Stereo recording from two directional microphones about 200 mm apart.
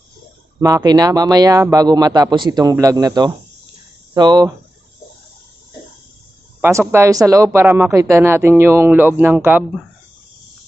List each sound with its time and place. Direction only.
0.6 s speech: 20° right (ahead or behind)
6.9 s speech: 15° right (ahead or behind)